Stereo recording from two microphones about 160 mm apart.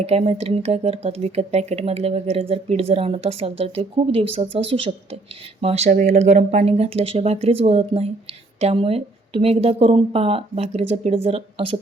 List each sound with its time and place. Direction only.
0.0 s speech: 40° right (ahead or behind)